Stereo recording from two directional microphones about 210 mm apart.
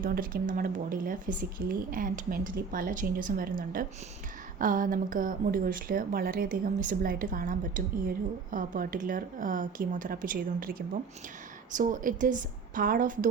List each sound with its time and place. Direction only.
0.0 s speech: 45° right (ahead or behind)